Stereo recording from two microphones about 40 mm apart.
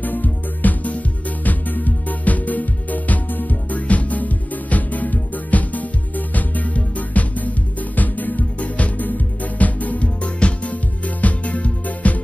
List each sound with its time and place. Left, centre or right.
0.0 s music: left